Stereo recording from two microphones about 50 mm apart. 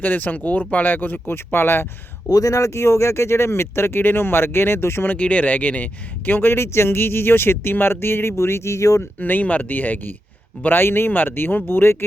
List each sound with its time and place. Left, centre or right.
0.0 s speech: left
1.3 s speech: left
2.3 s speech: left
5.0 s speech: left
6.6 s speech: left
9.0 s speech: left